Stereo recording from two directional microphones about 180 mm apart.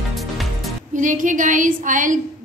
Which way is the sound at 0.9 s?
45° right (ahead or behind).